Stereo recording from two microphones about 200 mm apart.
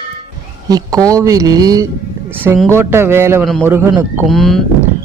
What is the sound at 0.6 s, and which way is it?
Speech, 20° right (ahead or behind).